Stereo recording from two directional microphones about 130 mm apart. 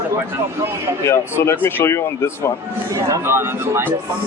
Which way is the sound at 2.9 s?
20° right (ahead or behind).